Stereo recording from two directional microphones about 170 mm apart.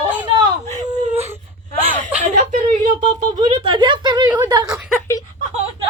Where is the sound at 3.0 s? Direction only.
25° right (ahead or behind).